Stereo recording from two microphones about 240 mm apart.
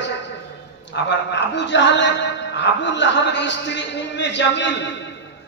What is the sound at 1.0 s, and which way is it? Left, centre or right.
Music, left.